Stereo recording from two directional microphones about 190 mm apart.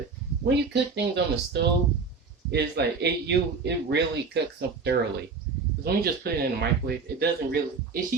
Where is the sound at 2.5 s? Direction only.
60° right (ahead or behind).